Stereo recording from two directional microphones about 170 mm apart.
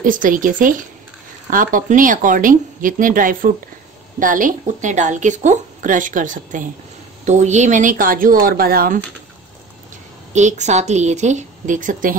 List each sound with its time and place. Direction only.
0.0 s speech: 55° right (ahead or behind)
10.3 s speech: 45° right (ahead or behind)